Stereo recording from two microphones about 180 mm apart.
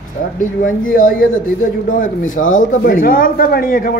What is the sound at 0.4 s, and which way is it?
A man's voice, 50° left (ahead or behind).